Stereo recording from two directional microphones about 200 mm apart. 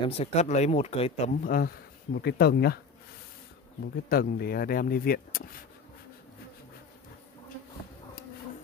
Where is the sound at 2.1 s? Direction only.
55° left (ahead or behind).